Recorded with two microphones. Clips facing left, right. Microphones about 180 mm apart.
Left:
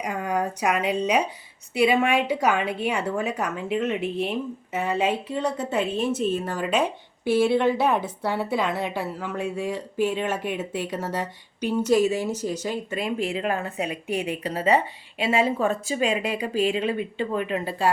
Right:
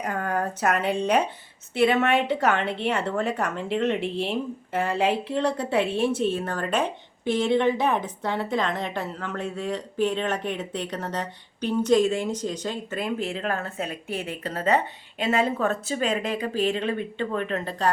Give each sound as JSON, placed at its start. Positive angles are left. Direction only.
{"t": 0.0, "sound": "a woman's voice", "side_deg": 10}
{"t": 6.1, "sound": "speech", "side_deg": -30}
{"t": 6.3, "sound": "a woman's voice", "side_deg": 10}